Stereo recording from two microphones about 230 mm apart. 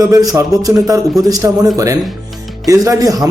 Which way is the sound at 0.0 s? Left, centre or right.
Centre.